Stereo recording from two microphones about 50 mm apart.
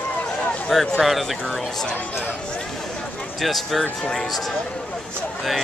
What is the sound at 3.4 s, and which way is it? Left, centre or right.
Speech, centre.